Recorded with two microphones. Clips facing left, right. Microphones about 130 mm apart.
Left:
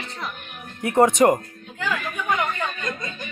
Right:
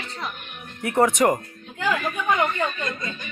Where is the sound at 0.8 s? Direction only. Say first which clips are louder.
Left 3 dB; 25° left (ahead or behind).